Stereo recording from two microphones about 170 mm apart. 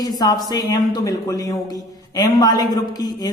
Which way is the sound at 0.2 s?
25° left (ahead or behind).